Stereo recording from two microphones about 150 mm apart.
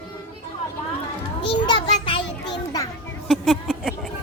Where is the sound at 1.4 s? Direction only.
35° left (ahead or behind).